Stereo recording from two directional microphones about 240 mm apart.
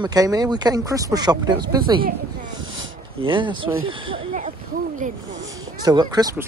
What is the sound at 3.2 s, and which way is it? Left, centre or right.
Speech, centre.